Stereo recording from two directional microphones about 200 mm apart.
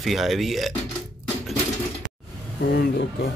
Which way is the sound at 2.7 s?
55° left (ahead or behind).